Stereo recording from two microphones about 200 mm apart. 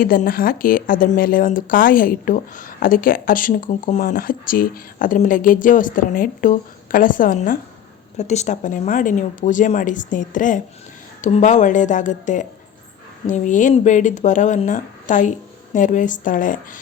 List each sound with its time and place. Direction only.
0.0 s speech: 45° left (ahead or behind)